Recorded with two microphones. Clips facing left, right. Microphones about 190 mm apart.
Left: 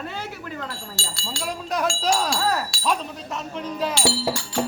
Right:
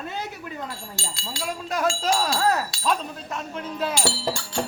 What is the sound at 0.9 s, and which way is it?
Speech, 20° right (ahead or behind).